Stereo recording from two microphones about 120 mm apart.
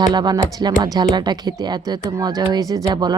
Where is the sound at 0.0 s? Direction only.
35° right (ahead or behind).